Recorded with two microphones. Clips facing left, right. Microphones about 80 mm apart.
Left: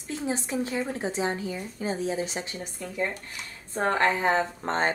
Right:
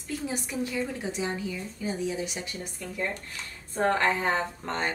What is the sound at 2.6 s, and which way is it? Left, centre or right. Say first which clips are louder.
Speech: left 3 dB; centre.